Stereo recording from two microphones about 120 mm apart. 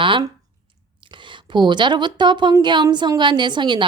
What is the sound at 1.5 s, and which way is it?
A woman's voice, 40° right (ahead or behind).